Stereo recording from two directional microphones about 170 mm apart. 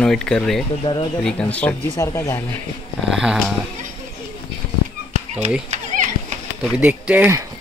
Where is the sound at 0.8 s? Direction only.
30° left (ahead or behind).